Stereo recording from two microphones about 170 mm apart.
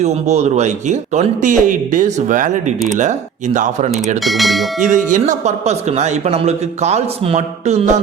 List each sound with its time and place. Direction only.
0.0 s speech: 40° right (ahead or behind)
4.2 s speech: centre (ahead or behind)
4.8 s speech: 45° right (ahead or behind)